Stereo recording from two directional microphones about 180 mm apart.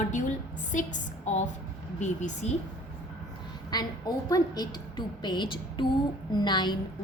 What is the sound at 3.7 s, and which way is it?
A woman's voice, 20° left (ahead or behind).